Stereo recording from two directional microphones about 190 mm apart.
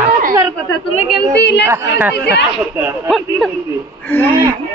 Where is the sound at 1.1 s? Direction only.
65° left (ahead or behind).